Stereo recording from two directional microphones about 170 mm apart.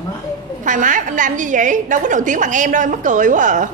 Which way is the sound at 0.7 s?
50° right (ahead or behind).